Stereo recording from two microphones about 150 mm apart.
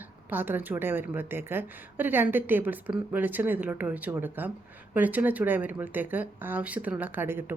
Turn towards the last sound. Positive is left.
turn(degrees=-15)  # may be behind; listen again after turning